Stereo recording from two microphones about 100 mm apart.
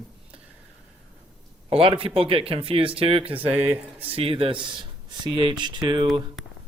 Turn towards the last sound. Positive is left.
turn(degrees=-55)  # may be behind; listen again after turning